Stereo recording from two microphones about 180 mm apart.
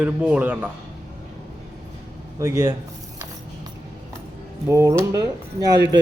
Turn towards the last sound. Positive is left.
turn(degrees=-80)